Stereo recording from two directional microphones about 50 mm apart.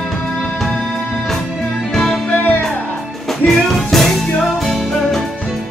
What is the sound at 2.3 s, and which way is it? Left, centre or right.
Music, left.